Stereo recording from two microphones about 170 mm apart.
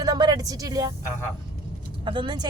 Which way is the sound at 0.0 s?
25° right (ahead or behind).